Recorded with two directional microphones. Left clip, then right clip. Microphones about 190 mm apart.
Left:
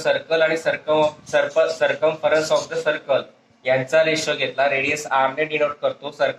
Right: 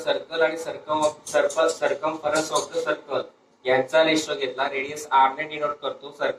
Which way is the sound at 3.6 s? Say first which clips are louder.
Left 2 dB; 45° left (ahead or behind).